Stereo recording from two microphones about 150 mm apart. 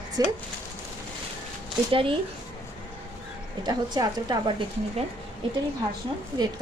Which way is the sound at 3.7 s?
25° right (ahead or behind).